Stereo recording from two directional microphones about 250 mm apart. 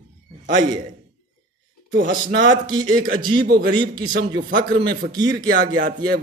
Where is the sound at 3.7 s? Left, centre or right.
Centre.